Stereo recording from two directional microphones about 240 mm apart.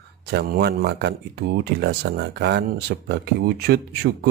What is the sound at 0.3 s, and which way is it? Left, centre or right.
Speech, right.